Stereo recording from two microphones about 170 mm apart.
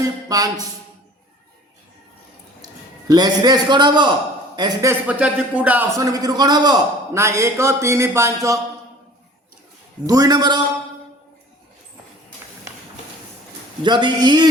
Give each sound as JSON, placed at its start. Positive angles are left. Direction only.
{"t": 0.0, "sound": "speech", "side_deg": -20}
{"t": 3.1, "sound": "a man's voice", "side_deg": -25}
{"t": 10.1, "sound": "a man's voice", "side_deg": -20}
{"t": 13.8, "sound": "a man's voice", "side_deg": -25}